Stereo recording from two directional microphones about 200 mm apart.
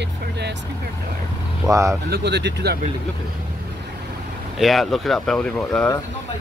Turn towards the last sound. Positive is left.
turn(degrees=5)  # may be behind; listen again after turning